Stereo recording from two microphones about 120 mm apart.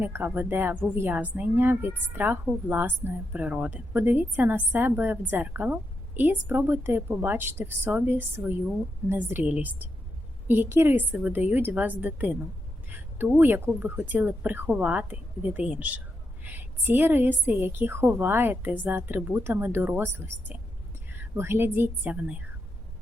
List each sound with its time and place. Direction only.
0.0 s a woman's voice: 15° right (ahead or behind)